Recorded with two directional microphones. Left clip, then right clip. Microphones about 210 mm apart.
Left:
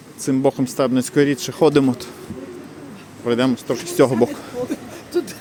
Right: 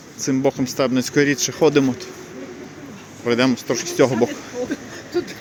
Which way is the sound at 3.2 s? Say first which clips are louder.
Right 1 dB; 5° left (ahead or behind).